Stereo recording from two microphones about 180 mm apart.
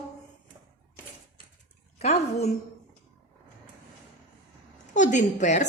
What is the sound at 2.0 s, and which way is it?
Speech, 35° left (ahead or behind).